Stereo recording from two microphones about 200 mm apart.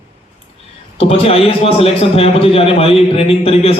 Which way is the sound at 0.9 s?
30° left (ahead or behind).